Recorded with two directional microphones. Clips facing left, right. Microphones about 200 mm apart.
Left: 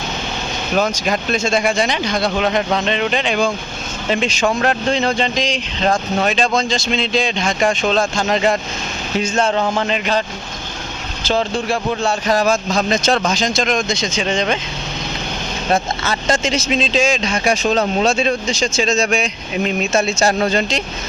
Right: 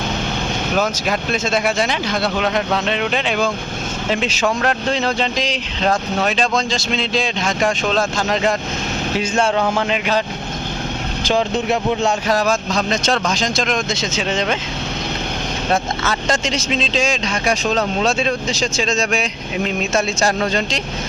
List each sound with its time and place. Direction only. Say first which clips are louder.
0.8 s speech: left 3 dB; 5° right (ahead or behind)
9.1 s speech: left 1 dB; 10° right (ahead or behind)
11.2 s speech: even; 15° right (ahead or behind)
12.3 s a man's voice: left 2 dB; centre (ahead or behind)
15.7 s speech: left 2 dB; centre (ahead or behind)